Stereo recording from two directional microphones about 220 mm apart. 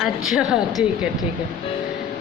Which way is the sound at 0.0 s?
Centre (ahead or behind).